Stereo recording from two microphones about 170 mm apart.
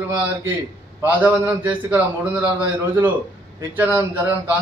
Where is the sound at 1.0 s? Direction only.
10° right (ahead or behind).